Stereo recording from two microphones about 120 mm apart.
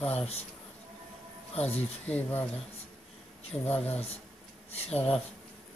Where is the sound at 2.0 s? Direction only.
15° left (ahead or behind).